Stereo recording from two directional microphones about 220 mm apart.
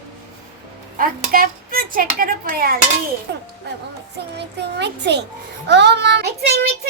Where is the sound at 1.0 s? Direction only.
40° right (ahead or behind).